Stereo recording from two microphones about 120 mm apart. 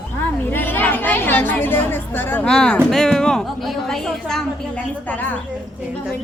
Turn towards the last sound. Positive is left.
turn(degrees=15)  # may be behind; listen again after turning